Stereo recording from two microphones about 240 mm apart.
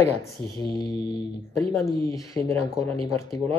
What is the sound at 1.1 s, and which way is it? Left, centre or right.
Speech, centre.